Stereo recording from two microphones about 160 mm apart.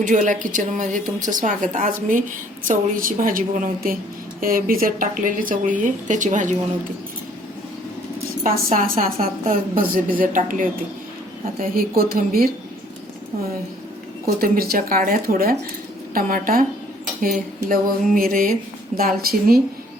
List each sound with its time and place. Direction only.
0.0 s a woman's voice: 55° right (ahead or behind)
8.4 s speech: 60° right (ahead or behind)
14.4 s speech: 65° right (ahead or behind)